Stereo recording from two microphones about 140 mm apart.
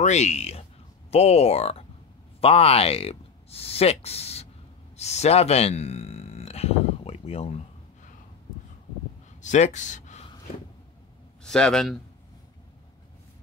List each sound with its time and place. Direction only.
0.0 s speech: 50° left (ahead or behind)
4.9 s a sound: 50° left (ahead or behind)
9.4 s speech: 60° left (ahead or behind)
11.4 s a man's voice: 5° left (ahead or behind)